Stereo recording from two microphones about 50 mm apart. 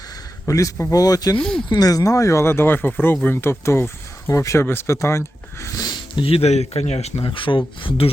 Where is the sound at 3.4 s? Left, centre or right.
Left.